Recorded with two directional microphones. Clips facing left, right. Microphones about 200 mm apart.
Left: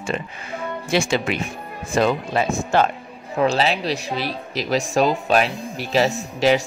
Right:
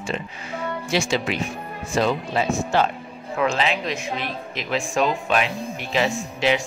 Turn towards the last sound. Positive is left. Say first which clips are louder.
# left 4 dB
turn(degrees=40)  # may be behind; listen again after turning